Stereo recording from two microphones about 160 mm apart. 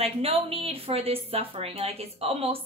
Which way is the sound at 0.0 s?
35° right (ahead or behind).